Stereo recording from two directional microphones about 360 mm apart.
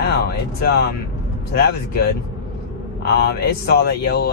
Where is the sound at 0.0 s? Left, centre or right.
Left.